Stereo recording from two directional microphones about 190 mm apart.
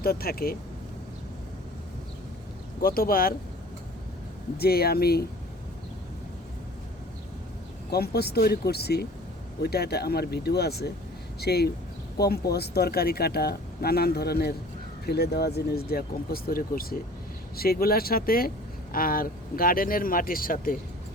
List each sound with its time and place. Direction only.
0.0 s speech: 50° left (ahead or behind)
2.8 s speech: 50° left (ahead or behind)
4.5 s speech: 55° left (ahead or behind)
7.9 s speech: 55° left (ahead or behind)